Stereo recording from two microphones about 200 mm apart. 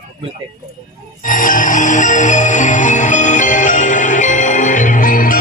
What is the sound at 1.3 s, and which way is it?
Music, 40° left (ahead or behind).